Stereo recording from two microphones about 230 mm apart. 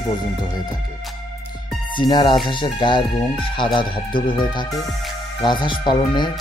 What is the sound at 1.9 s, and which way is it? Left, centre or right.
Speech, centre.